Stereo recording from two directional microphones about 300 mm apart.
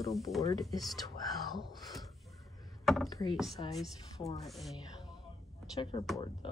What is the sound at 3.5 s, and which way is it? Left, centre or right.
Speech, centre.